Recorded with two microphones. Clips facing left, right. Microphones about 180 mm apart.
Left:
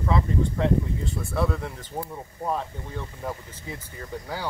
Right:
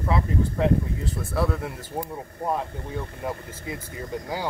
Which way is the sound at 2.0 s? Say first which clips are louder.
Right 2 dB; 15° right (ahead or behind).